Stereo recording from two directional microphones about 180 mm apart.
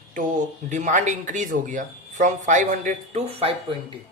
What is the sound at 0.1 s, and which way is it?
Speech, 45° right (ahead or behind).